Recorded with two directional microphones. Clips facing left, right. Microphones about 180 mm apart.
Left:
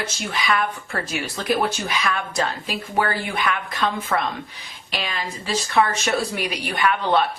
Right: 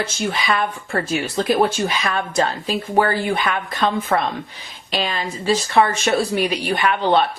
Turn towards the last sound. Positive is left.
turn(degrees=-25)  # may be behind; listen again after turning